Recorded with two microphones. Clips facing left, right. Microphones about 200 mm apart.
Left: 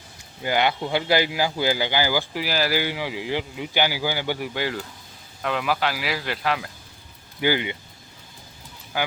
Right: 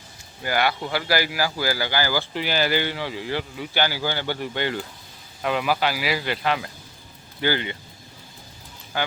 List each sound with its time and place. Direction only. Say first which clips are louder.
0.4 s speech: left 1 dB; 20° left (ahead or behind)
2.4 s speech: right 3 dB; centre (ahead or behind)
7.4 s speech: left 2 dB; 15° left (ahead or behind)
8.9 s speech: even; 10° left (ahead or behind)